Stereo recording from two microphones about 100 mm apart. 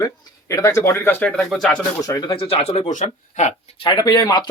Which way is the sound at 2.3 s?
70° left (ahead or behind).